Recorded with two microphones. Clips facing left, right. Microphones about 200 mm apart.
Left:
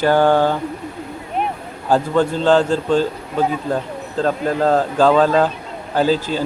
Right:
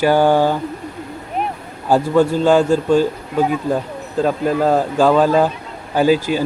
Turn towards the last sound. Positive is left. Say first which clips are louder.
# right 3 dB
turn(degrees=-10)  # may be behind; listen again after turning